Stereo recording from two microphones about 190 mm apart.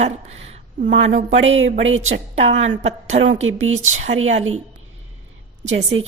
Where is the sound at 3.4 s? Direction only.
90° right.